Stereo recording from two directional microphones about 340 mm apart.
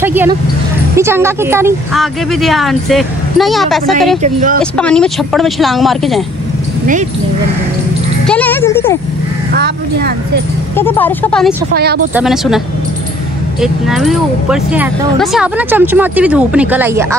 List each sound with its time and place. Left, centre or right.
0.0 s speech: centre
4.2 s speech: right
4.7 s speech: centre
8.3 s speech: centre
9.5 s speech: right
10.8 s speech: centre
11.7 s speech: right
12.1 s speech: centre